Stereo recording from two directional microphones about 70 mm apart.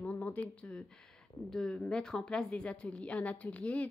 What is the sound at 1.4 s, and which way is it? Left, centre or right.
A woman's voice, centre.